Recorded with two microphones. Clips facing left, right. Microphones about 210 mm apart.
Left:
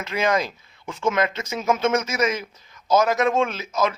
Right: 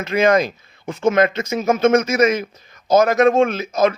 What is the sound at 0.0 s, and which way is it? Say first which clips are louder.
A man's voice: right 7 dB; 50° right (ahead or behind).